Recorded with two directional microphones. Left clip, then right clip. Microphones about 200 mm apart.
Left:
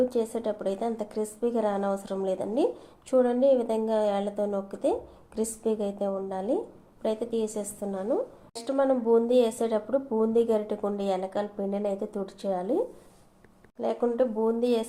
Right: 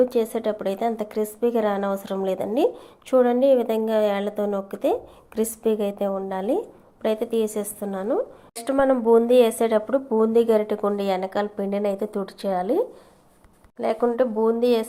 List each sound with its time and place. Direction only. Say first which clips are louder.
0.0 s a woman's voice: right 6 dB; 25° right (ahead or behind)